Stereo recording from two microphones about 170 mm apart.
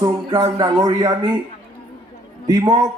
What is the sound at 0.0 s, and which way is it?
Speech, 25° right (ahead or behind).